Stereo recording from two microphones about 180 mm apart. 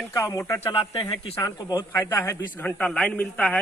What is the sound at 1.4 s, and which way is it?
A man's voice, 20° left (ahead or behind).